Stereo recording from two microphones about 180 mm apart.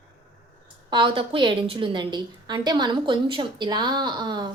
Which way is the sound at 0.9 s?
30° right (ahead or behind).